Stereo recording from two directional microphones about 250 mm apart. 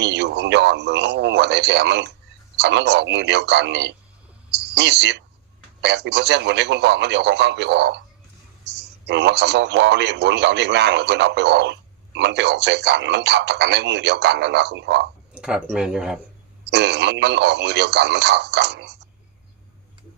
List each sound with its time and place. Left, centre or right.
0.0 s speech: right
15.4 s speech: centre
16.6 s speech: right